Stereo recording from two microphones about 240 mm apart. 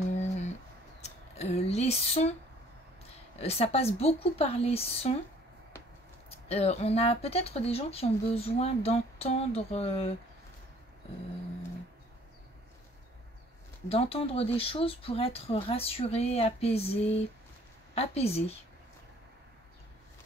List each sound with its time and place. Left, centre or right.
0.1 s a sound: left
3.3 s speech: left
6.5 s speech: left
13.8 s speech: left